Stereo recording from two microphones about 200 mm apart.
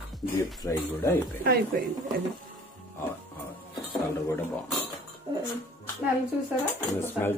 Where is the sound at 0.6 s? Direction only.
15° left (ahead or behind).